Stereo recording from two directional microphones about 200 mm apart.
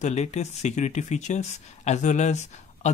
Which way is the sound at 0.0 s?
35° left (ahead or behind).